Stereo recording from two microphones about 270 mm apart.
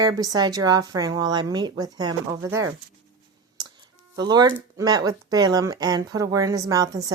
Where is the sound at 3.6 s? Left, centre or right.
Centre.